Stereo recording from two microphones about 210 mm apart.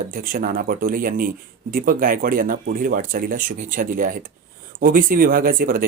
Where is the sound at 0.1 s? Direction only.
40° right (ahead or behind).